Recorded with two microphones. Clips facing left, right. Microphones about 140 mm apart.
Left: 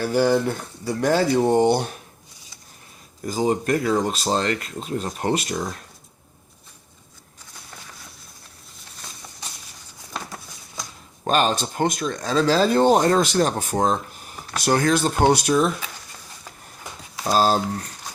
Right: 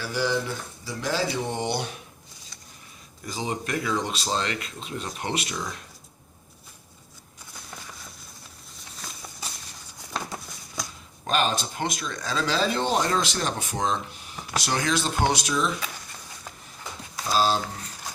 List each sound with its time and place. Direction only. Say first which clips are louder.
0.0 s speech: left 8 dB; 50° left (ahead or behind)
3.2 s speech: left 9 dB; 45° left (ahead or behind)
11.3 s speech: left 5 dB; 45° left (ahead or behind)
17.2 s speech: left 4 dB; 45° left (ahead or behind)